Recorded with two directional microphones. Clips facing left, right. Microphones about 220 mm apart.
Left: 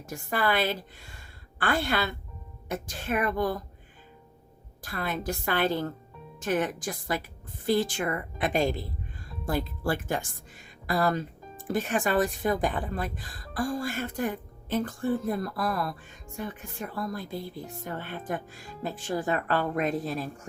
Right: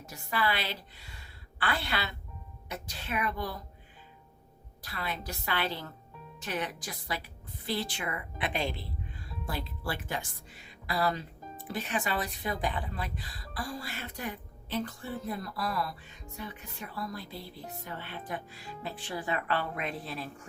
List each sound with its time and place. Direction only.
0.0 s a woman's voice: 50° left (ahead or behind)
4.8 s speech: 50° left (ahead or behind)